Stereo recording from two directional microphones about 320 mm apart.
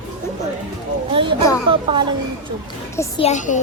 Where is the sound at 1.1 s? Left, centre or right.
Centre.